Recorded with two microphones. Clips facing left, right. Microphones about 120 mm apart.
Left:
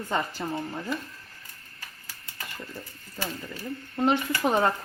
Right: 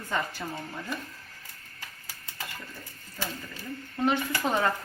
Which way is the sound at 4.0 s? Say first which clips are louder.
Left 2 dB; 25° left (ahead or behind).